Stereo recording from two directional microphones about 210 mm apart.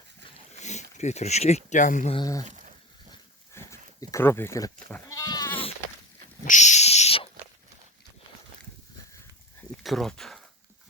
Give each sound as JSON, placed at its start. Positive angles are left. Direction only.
{"t": 0.5, "sound": "speech", "side_deg": 35}
{"t": 2.1, "sound": "speech", "side_deg": 15}
{"t": 2.4, "sound": "a sound", "side_deg": -35}
{"t": 3.5, "sound": "dog", "side_deg": 15}
{"t": 4.1, "sound": "speech", "side_deg": 10}
{"t": 6.4, "sound": "owl", "side_deg": 35}
{"t": 9.8, "sound": "speech", "side_deg": 0}